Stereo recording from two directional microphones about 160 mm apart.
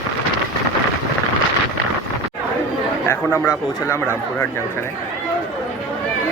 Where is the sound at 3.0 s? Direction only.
15° left (ahead or behind).